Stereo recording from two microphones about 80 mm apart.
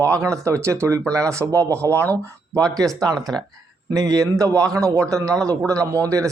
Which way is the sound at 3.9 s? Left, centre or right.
Right.